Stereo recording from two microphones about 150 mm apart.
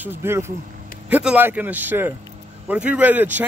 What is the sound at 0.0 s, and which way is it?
Speech, 15° right (ahead or behind).